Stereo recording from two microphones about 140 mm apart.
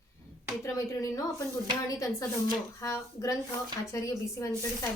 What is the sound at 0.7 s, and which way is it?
A woman's voice, 25° left (ahead or behind).